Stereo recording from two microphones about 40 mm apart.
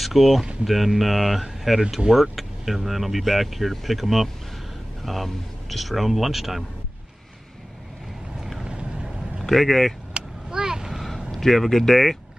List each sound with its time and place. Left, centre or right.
0.0 s speech: centre
8.6 s vehicle: right
9.5 s speech: centre
10.1 s a sound: centre
11.3 s speech: centre